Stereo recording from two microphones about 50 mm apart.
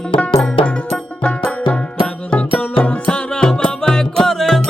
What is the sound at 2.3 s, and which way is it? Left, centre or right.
Music, left.